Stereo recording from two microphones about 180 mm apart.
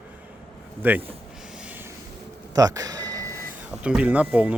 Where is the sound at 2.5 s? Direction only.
20° right (ahead or behind).